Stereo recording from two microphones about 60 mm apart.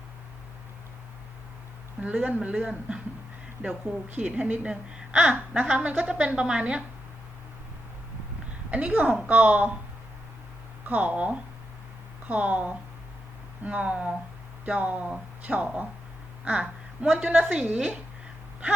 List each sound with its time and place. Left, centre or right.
2.0 s a man's voice: right
4.1 s a woman's voice: right
4.7 s a woman's voice: centre
5.2 s a woman's voice: right
8.7 s a woman's voice: right
10.8 s a woman's voice: right
16.4 s a sound: right
17.2 s a woman's voice: right
17.7 s a woman's voice: centre